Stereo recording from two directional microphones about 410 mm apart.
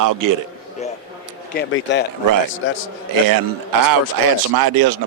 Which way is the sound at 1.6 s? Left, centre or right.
Left.